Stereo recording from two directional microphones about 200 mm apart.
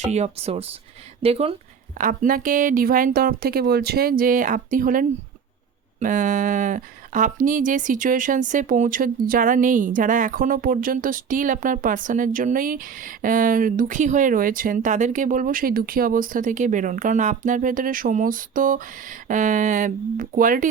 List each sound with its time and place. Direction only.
0.0 s speech: 35° right (ahead or behind)
2.0 s speech: 45° right (ahead or behind)